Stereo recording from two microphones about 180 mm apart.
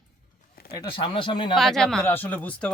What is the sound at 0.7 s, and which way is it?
Speech, 30° left (ahead or behind).